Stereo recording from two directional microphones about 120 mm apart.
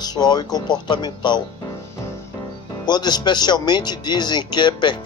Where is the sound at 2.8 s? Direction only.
35° left (ahead or behind).